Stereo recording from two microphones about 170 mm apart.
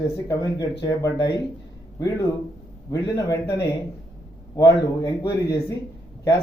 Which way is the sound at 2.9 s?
20° left (ahead or behind).